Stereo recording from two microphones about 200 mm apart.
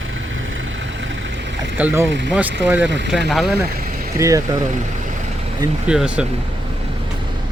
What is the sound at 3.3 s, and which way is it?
Speech, centre (ahead or behind).